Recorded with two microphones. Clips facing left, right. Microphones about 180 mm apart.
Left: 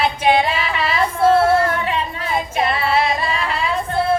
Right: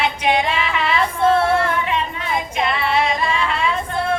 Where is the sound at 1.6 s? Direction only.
35° left (ahead or behind).